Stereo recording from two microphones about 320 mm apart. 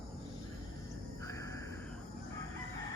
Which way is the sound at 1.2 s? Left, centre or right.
Centre.